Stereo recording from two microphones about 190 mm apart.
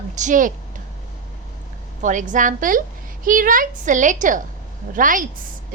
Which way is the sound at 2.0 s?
40° right (ahead or behind).